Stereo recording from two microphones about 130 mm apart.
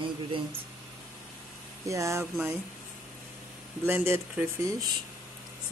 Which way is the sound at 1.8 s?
25° right (ahead or behind).